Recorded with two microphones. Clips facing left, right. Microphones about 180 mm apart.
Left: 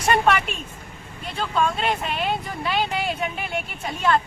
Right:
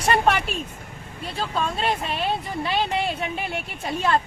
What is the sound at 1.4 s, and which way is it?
Speech, 35° right (ahead or behind).